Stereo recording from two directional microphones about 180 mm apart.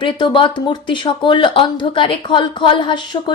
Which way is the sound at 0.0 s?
25° left (ahead or behind).